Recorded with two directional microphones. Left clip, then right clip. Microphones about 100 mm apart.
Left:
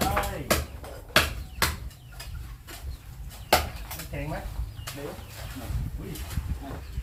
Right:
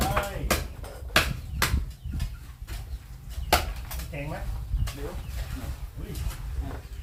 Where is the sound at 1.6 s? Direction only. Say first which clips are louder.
Left 1 dB; 35° right (ahead or behind).